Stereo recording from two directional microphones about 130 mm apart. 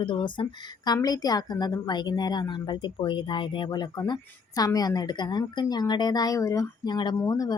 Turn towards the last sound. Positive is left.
turn(degrees=30)  # may be behind; listen again after turning